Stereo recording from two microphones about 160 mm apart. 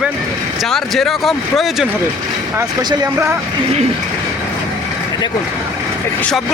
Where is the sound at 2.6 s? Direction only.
15° right (ahead or behind).